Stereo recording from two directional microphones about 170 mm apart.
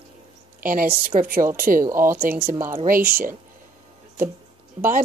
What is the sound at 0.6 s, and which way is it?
Speech, 55° right (ahead or behind).